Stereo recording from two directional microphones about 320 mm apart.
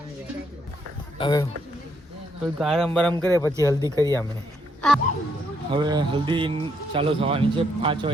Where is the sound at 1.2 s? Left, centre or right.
Centre.